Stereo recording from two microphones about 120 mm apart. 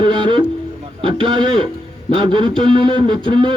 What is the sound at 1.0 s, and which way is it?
A man's voice, 45° right (ahead or behind).